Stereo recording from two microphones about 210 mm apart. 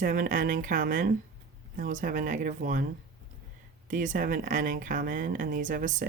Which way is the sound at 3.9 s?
40° right (ahead or behind).